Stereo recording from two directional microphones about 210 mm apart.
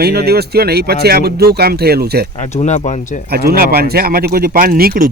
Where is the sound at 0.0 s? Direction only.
50° right (ahead or behind).